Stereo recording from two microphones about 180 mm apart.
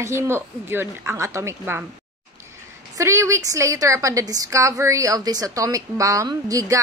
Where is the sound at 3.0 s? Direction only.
15° right (ahead or behind).